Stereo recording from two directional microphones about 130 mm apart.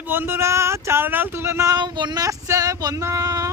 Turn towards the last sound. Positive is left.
turn(degrees=-20)  # may be behind; listen again after turning